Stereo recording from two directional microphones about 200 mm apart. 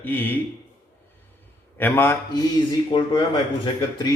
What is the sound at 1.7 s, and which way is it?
Speech, 10° left (ahead or behind).